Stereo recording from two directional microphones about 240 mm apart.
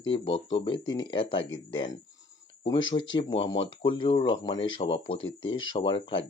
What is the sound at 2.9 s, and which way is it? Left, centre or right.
Speech, left.